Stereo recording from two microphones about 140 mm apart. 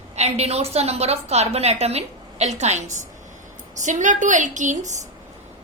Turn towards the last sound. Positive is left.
turn(degrees=-60)  # may be behind; listen again after turning